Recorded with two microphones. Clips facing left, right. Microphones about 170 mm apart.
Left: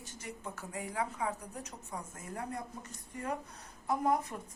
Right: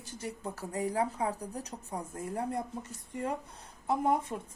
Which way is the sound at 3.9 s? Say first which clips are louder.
Right 2 dB; 25° right (ahead or behind).